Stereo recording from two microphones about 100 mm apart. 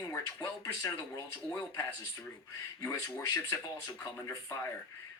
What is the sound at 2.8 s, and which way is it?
Speech, 30° left (ahead or behind).